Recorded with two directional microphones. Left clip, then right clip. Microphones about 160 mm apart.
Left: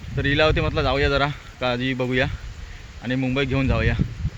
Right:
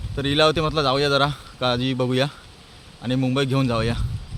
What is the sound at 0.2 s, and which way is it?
Speech, 20° right (ahead or behind).